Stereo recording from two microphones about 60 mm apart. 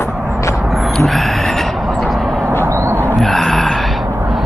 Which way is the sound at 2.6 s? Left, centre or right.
Right.